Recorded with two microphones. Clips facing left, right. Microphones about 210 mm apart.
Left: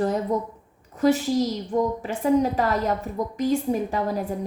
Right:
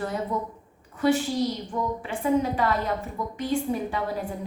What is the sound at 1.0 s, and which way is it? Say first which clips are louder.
A woman's voice: left 3 dB; 40° left (ahead or behind).